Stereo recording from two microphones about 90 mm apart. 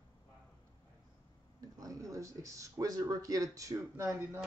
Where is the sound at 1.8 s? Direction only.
40° right (ahead or behind).